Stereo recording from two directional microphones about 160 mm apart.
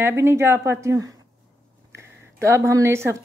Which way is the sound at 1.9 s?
15° right (ahead or behind).